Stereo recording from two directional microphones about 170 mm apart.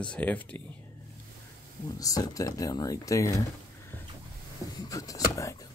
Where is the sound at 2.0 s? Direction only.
20° left (ahead or behind).